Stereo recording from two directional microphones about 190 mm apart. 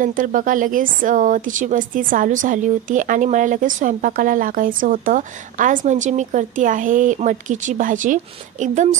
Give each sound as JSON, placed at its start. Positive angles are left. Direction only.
{"t": 0.0, "sound": "speech", "side_deg": -45}